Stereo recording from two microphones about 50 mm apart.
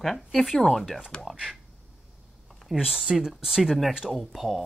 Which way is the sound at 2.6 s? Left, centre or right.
Centre.